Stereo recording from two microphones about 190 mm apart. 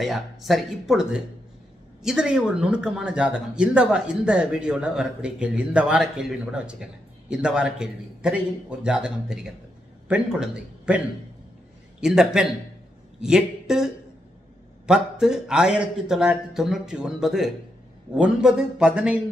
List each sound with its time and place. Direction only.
0.0 s a man's voice: centre (ahead or behind)
12.0 s a man's voice: 5° right (ahead or behind)